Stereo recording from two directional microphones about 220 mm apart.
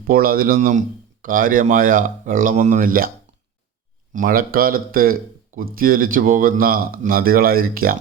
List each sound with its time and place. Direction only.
0.1 s speech: 40° right (ahead or behind)
4.1 s speech: 40° right (ahead or behind)